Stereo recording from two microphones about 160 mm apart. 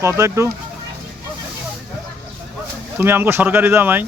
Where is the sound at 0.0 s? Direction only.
20° right (ahead or behind).